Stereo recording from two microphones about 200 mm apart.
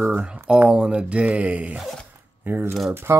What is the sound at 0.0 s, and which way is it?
Speech, 5° right (ahead or behind).